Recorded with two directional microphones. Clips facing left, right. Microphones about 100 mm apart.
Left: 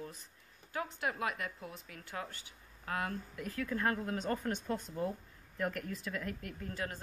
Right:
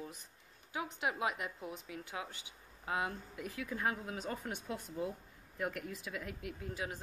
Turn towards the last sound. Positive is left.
turn(degrees=-10)  # may be behind; listen again after turning